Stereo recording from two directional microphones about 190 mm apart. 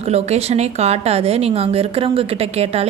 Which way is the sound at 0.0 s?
35° right (ahead or behind).